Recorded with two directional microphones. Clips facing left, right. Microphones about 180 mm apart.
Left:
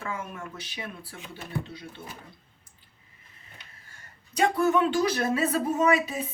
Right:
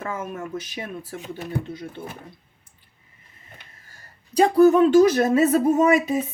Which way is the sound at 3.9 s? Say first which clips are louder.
Right 9 dB; 35° right (ahead or behind).